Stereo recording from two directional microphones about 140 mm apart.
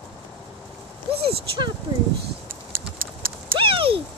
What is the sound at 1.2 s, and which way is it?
Speech, 40° right (ahead or behind).